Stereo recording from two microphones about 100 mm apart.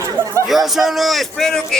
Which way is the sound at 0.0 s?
30° right (ahead or behind).